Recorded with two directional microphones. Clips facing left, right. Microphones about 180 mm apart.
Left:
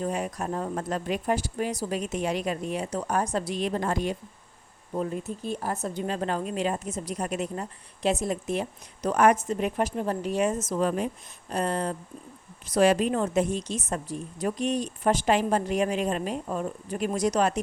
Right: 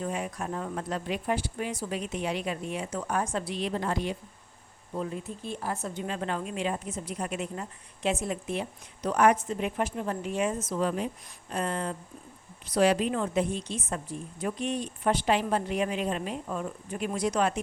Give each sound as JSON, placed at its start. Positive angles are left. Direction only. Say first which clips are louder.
{"t": 0.0, "sound": "a woman's voice", "louder": "left 3 dB", "side_deg": 40}